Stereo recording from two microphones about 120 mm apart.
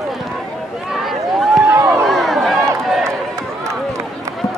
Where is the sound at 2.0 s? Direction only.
Centre (ahead or behind).